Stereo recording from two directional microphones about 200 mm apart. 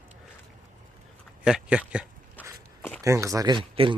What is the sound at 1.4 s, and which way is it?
Speech, 5° right (ahead or behind).